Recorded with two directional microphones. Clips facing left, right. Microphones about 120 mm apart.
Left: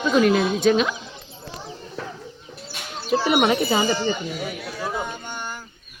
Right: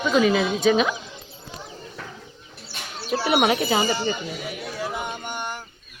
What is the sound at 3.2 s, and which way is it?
Speech, 5° right (ahead or behind).